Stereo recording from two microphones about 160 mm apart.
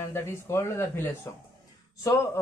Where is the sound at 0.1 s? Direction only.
15° left (ahead or behind).